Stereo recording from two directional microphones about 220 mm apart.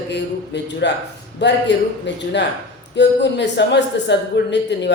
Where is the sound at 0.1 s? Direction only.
50° left (ahead or behind).